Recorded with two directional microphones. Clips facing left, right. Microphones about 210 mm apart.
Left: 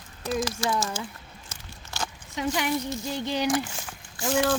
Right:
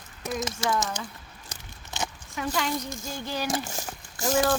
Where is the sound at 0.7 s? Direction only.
20° right (ahead or behind).